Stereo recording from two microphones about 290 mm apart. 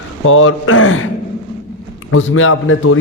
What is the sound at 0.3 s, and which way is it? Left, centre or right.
Speech, left.